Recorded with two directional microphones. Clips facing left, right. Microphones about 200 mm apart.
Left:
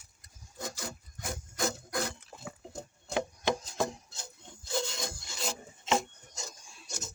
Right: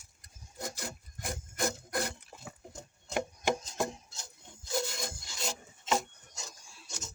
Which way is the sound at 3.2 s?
15° right (ahead or behind).